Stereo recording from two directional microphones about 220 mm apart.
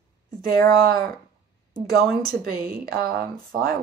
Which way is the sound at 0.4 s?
15° left (ahead or behind).